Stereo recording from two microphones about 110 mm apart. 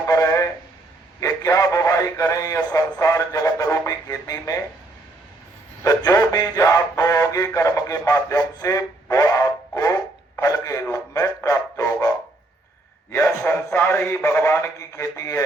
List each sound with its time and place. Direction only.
0.1 s a sound: 30° left (ahead or behind)
3.0 s radio: 30° left (ahead or behind)
5.8 s music: 30° left (ahead or behind)
10.4 s a sound: 30° left (ahead or behind)
11.4 s music: 30° left (ahead or behind)
13.2 s a man's voice: 20° left (ahead or behind)